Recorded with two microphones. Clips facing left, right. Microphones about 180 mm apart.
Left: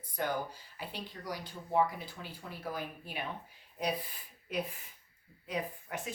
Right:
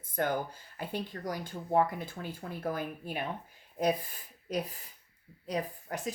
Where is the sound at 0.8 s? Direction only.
50° right (ahead or behind).